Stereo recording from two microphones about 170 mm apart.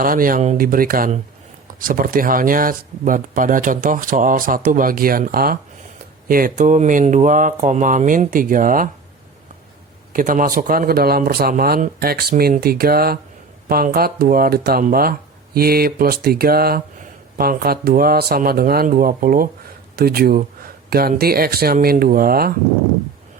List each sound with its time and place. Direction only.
0.0 s speech: 55° right (ahead or behind)
10.1 s speech: 55° right (ahead or behind)